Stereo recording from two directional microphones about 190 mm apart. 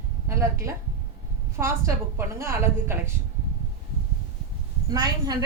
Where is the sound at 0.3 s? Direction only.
15° right (ahead or behind).